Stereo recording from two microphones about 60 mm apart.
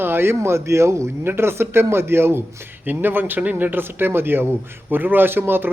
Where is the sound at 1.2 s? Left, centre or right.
Right.